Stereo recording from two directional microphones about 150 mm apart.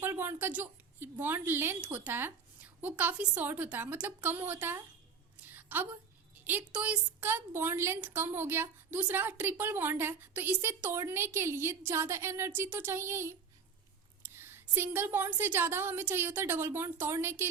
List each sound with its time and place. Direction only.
0.0 s a woman's voice: 15° right (ahead or behind)
5.5 s a sound: 10° right (ahead or behind)
6.4 s a woman's voice: 10° right (ahead or behind)
14.3 s a woman's voice: 15° right (ahead or behind)